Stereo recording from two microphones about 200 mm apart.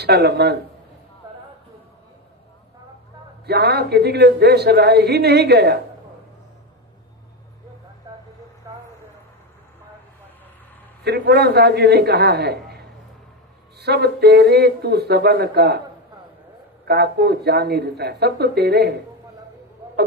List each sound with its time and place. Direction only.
0.0 s speech: 55° right (ahead or behind)
3.4 s speech: 55° right (ahead or behind)
11.0 s speech: 55° right (ahead or behind)
16.8 s speech: 55° right (ahead or behind)